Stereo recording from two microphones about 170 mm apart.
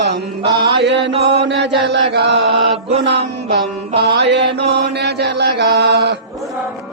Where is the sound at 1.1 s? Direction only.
35° right (ahead or behind).